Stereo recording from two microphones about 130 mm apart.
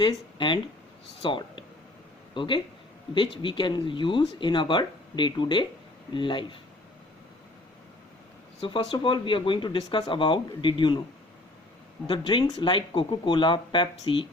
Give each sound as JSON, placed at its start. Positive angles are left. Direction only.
{"t": 0.0, "sound": "speech", "side_deg": 40}
{"t": 8.6, "sound": "speech", "side_deg": 40}
{"t": 12.0, "sound": "speech", "side_deg": 40}